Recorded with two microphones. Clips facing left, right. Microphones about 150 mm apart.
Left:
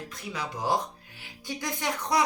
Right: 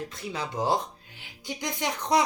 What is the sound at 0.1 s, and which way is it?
Speech, 25° right (ahead or behind).